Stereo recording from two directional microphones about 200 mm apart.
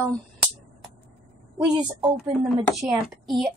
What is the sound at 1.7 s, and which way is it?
Speech, 25° right (ahead or behind).